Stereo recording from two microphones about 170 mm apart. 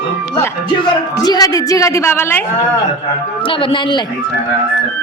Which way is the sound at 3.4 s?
30° left (ahead or behind).